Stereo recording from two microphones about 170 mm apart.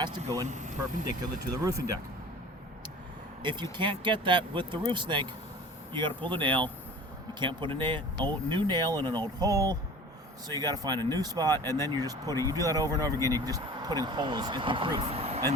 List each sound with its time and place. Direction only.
0.4 s speech: 45° right (ahead or behind)
1.2 s speech: 20° right (ahead or behind)
3.4 s speech: 25° right (ahead or behind)